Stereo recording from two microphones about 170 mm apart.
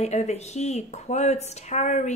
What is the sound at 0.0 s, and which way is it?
A woman's voice, 40° left (ahead or behind).